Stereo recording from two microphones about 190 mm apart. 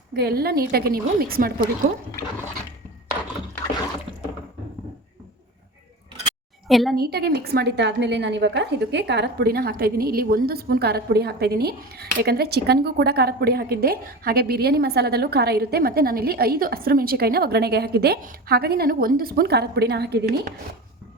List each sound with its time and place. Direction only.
0.2 s a woman's voice: 55° right (ahead or behind)
6.7 s a woman's voice: centre (ahead or behind)
6.9 s a woman's voice: 55° right (ahead or behind)